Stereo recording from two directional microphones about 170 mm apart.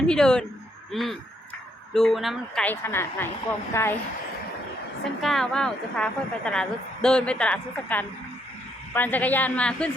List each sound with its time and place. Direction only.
0.1 s a woman's voice: 5° left (ahead or behind)
2.6 s a woman's voice: 15° left (ahead or behind)
5.2 s a woman's voice: centre (ahead or behind)